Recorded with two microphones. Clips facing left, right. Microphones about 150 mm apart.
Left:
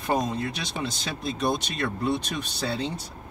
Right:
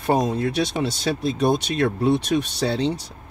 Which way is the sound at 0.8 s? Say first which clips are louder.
Right 8 dB; 65° right (ahead or behind).